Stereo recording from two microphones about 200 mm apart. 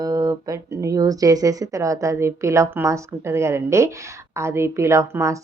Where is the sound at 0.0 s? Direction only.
20° right (ahead or behind).